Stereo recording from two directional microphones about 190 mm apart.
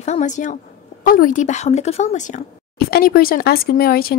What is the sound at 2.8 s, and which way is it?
Speech, 55° left (ahead or behind).